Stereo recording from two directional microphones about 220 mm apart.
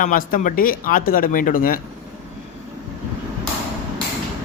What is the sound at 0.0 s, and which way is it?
Speech, 40° left (ahead or behind).